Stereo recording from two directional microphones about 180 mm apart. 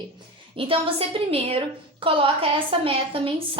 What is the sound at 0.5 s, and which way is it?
A woman's voice, 30° right (ahead or behind).